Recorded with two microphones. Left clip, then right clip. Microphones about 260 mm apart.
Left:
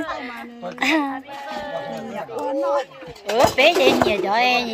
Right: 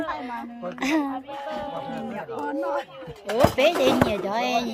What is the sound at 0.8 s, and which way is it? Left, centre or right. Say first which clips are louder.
Speech: left 5 dB; centre.